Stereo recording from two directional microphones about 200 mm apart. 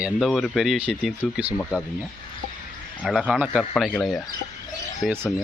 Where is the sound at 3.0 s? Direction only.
5° right (ahead or behind).